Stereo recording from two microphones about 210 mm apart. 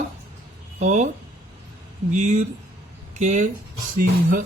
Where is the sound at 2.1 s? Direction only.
35° right (ahead or behind).